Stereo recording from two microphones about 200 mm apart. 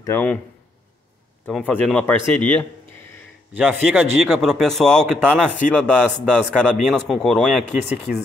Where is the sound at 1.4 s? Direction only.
5° left (ahead or behind).